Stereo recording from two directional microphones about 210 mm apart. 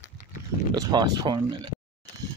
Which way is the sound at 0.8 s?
20° right (ahead or behind).